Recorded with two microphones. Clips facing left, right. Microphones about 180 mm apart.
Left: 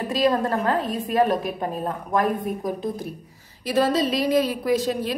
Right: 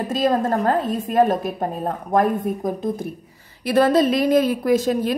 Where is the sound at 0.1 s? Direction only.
40° right (ahead or behind).